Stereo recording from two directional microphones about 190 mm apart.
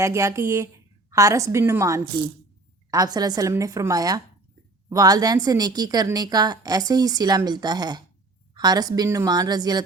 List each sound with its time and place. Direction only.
0.0 s a woman's voice: 15° right (ahead or behind)